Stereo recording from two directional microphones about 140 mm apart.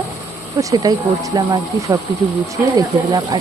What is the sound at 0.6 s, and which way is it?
Speech, 25° right (ahead or behind).